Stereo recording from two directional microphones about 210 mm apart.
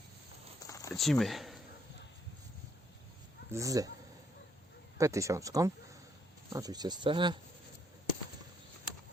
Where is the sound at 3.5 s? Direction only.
15° right (ahead or behind).